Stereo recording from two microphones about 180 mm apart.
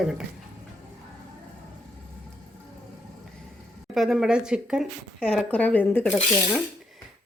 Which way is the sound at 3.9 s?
Centre (ahead or behind).